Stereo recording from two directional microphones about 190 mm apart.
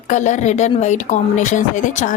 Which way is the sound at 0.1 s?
40° left (ahead or behind).